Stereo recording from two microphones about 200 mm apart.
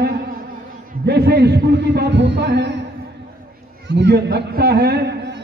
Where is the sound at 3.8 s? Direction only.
60° right (ahead or behind).